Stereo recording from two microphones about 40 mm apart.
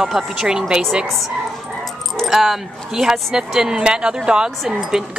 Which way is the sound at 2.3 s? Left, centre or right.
Centre.